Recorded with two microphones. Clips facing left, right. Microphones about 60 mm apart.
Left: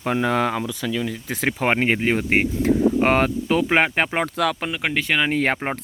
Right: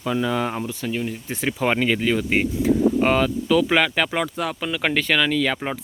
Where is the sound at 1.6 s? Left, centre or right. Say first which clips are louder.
Even; left.